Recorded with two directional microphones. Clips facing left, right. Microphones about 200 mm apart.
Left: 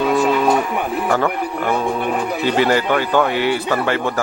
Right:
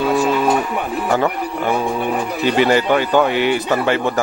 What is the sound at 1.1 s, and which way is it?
A man's voice, 15° right (ahead or behind).